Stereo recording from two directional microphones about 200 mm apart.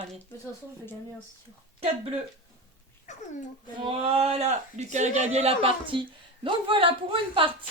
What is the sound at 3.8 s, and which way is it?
A man's voice, 25° right (ahead or behind).